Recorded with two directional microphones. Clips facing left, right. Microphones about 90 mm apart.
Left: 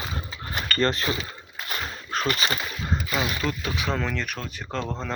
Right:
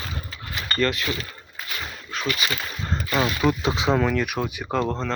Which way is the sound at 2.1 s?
40° left (ahead or behind).